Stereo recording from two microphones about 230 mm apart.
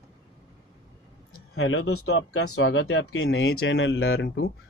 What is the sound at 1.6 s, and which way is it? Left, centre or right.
Speech, left.